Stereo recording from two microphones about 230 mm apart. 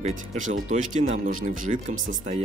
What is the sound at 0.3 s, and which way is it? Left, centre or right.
Speech, right.